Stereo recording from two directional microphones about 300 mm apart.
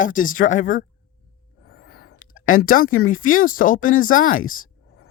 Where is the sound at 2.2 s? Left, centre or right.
Left.